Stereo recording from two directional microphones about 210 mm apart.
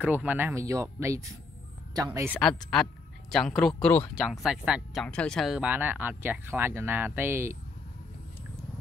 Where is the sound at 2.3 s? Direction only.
5° left (ahead or behind).